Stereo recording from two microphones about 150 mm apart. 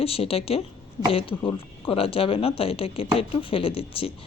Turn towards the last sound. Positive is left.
turn(degrees=40)  # may be behind; listen again after turning